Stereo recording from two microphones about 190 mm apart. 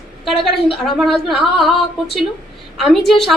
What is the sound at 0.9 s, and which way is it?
A woman's voice, centre (ahead or behind).